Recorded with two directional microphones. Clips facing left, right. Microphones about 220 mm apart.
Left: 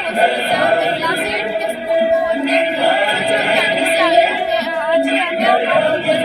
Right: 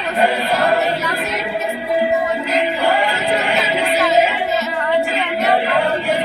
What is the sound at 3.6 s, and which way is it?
Music, 35° left (ahead or behind).